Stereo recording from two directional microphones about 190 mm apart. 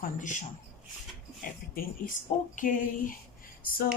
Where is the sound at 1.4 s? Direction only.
50° left (ahead or behind).